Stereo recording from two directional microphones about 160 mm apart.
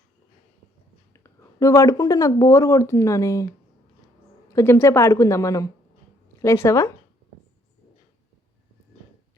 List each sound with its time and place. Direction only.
1.1 s a woman's voice: 20° left (ahead or behind)